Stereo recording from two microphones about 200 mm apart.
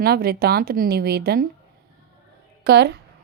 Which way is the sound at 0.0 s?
50° right (ahead or behind).